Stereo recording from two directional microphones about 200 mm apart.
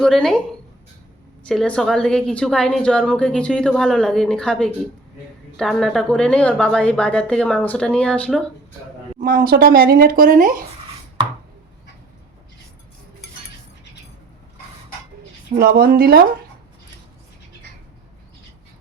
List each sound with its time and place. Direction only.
0.0 s a woman's voice: centre (ahead or behind)
1.5 s a woman's voice: 5° left (ahead or behind)
9.2 s speech: 45° right (ahead or behind)
15.5 s speech: 50° right (ahead or behind)